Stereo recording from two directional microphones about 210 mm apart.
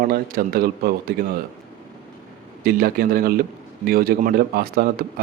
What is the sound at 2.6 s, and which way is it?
A man's voice, 45° right (ahead or behind).